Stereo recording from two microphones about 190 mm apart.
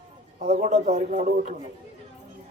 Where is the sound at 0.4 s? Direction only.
40° right (ahead or behind).